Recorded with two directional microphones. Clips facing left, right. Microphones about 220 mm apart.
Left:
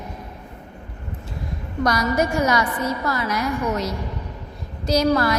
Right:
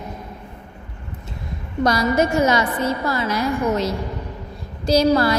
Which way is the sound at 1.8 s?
25° right (ahead or behind).